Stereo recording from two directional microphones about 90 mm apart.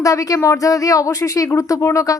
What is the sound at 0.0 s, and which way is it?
Speech, 35° left (ahead or behind).